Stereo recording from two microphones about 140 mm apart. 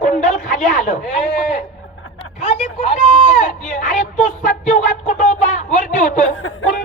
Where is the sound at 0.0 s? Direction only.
70° left (ahead or behind).